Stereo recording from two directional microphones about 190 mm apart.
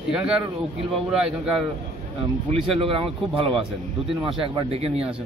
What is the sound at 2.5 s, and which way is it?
Speech, 30° right (ahead or behind).